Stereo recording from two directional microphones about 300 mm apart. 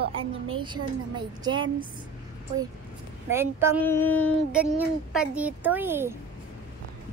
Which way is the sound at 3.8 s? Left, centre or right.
Centre.